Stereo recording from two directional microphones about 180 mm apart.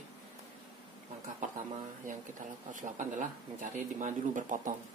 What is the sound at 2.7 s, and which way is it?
Speech, 45° right (ahead or behind).